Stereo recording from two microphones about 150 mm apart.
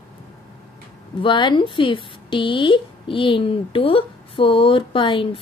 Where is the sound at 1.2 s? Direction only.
30° left (ahead or behind).